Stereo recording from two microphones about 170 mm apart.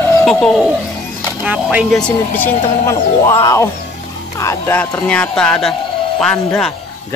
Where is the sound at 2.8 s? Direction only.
15° left (ahead or behind).